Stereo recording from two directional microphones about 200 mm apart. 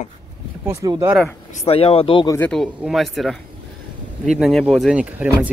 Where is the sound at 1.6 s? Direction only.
30° left (ahead or behind).